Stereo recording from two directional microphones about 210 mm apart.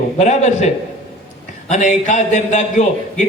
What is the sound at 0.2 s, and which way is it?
Speech, 35° left (ahead or behind).